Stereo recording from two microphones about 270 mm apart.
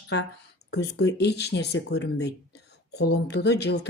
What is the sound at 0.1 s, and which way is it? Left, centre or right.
Speech, left.